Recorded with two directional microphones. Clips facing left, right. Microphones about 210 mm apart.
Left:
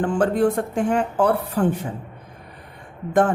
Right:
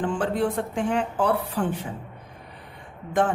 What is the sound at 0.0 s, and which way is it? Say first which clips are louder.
A woman's voice: left 5 dB; 45° left (ahead or behind).